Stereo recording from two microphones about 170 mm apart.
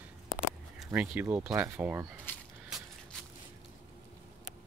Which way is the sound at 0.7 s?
5° right (ahead or behind).